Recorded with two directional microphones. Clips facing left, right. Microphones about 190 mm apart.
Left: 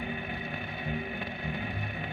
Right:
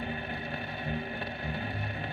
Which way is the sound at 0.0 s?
40° right (ahead or behind).